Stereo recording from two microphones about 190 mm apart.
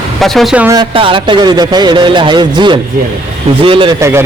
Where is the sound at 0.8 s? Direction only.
25° right (ahead or behind).